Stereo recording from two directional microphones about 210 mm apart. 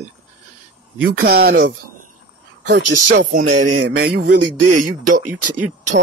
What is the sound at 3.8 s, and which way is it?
Speech, 50° right (ahead or behind).